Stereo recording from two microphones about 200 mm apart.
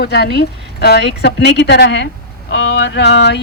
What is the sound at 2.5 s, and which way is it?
Speech, 65° left (ahead or behind).